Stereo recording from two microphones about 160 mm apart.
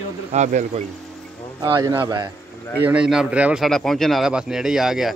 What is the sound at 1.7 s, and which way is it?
Speech, 25° right (ahead or behind).